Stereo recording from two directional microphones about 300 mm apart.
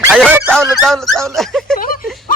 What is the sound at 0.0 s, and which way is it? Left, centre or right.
A man's voice, centre.